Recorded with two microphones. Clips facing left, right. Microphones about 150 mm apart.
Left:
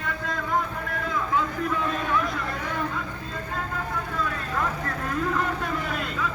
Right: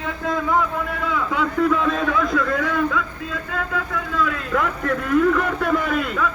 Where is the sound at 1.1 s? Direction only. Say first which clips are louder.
Right 3 dB; 85° right.